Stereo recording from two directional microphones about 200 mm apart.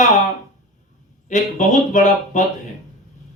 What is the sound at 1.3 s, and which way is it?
A man's voice, 35° left (ahead or behind).